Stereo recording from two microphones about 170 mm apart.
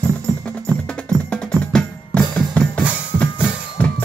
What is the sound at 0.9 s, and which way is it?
Music, 5° left (ahead or behind).